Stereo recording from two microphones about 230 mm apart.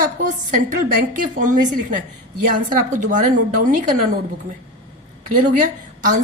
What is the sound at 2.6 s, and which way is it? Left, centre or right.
A woman's voice, right.